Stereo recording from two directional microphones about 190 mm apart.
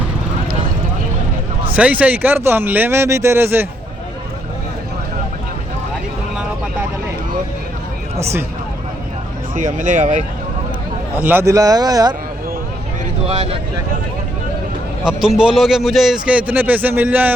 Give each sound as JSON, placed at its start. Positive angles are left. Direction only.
{"t": 1.7, "sound": "speech", "side_deg": -5}
{"t": 9.6, "sound": "speech", "side_deg": -40}
{"t": 11.1, "sound": "speech", "side_deg": -10}
{"t": 13.2, "sound": "speech", "side_deg": -30}
{"t": 15.4, "sound": "speech", "side_deg": -5}